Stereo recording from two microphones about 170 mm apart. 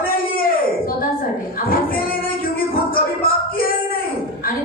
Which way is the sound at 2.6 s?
60° left (ahead or behind).